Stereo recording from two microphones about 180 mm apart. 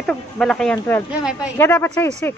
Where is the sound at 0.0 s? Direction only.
5° left (ahead or behind).